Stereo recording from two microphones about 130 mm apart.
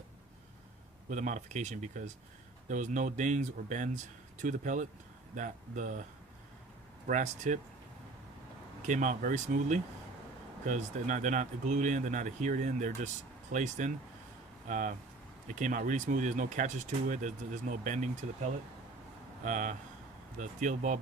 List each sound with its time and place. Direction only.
1.1 s speech: 70° right (ahead or behind)
7.1 s speech: 80° right
8.9 s speech: 75° right (ahead or behind)